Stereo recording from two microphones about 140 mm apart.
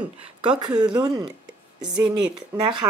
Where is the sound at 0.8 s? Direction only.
30° right (ahead or behind).